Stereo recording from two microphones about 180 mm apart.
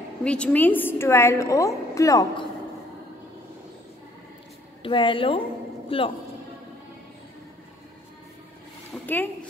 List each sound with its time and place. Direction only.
0.2 s a woman's voice: 5° left (ahead or behind)
4.8 s a woman's voice: 25° left (ahead or behind)
9.0 s speech: 10° left (ahead or behind)